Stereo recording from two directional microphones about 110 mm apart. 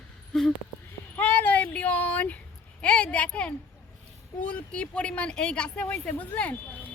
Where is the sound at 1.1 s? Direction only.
15° left (ahead or behind).